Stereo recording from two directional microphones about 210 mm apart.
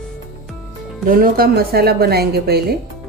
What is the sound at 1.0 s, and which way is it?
Speech, 45° right (ahead or behind).